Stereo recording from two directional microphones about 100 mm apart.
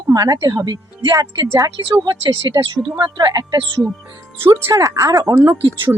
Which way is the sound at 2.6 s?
45° right (ahead or behind).